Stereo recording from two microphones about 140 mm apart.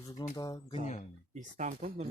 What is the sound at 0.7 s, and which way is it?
Speech, 50° left (ahead or behind).